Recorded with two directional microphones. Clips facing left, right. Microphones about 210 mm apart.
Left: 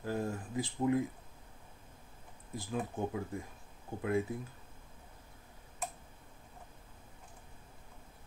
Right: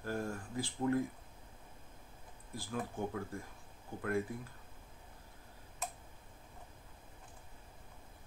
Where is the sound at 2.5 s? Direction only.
20° left (ahead or behind).